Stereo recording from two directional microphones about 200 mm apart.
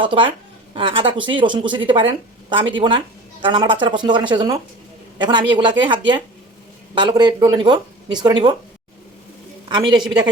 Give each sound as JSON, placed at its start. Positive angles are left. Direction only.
{"t": 0.0, "sound": "speech", "side_deg": -25}
{"t": 9.6, "sound": "speech", "side_deg": -20}